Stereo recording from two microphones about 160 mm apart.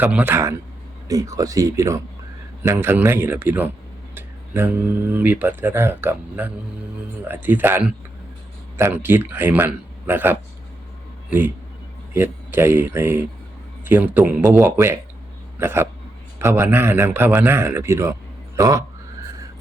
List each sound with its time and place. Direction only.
0.0 s a man's voice: 10° right (ahead or behind)